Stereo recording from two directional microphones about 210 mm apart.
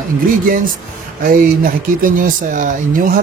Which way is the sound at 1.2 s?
45° right (ahead or behind).